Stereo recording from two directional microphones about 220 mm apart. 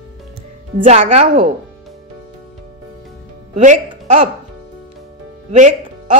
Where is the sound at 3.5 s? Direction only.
30° right (ahead or behind).